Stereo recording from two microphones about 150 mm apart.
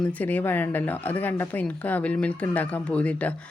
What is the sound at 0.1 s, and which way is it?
Speech, 10° left (ahead or behind).